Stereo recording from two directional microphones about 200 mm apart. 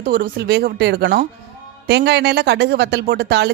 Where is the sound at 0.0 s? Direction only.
50° right (ahead or behind).